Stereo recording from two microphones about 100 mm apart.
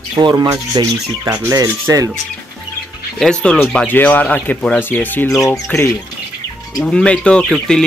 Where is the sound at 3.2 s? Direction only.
10° left (ahead or behind).